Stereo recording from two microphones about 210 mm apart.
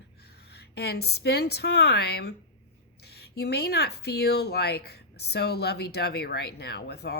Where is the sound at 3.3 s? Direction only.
50° left (ahead or behind).